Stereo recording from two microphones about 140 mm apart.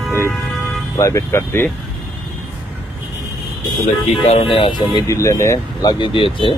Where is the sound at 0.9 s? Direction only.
20° left (ahead or behind).